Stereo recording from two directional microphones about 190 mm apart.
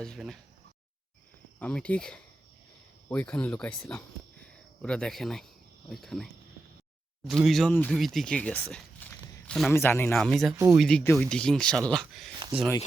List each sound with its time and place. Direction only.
0.0 s speech: centre (ahead or behind)
1.5 s speech: 5° left (ahead or behind)
7.3 s speech: centre (ahead or behind)
10.2 s speech: centre (ahead or behind)
12.3 s a sound: 25° right (ahead or behind)